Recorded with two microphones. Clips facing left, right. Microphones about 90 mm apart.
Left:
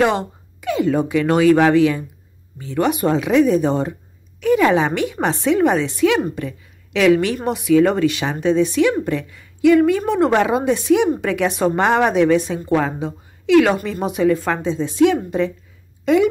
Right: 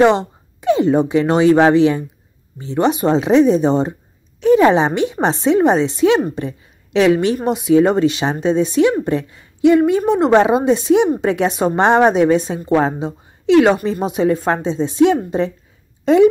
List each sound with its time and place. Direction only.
0.0 s a woman's voice: 20° right (ahead or behind)